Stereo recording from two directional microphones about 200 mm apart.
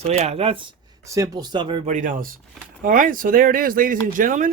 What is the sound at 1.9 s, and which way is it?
Speech, 40° right (ahead or behind).